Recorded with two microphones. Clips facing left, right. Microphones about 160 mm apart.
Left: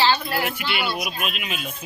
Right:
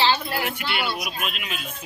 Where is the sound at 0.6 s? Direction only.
5° left (ahead or behind).